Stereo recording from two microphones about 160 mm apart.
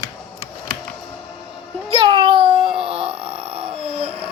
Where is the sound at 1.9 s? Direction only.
35° right (ahead or behind).